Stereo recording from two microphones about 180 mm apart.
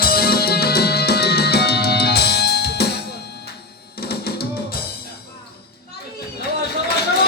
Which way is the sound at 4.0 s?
60° left (ahead or behind).